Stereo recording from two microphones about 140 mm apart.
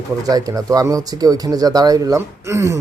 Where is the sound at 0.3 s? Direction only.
25° right (ahead or behind).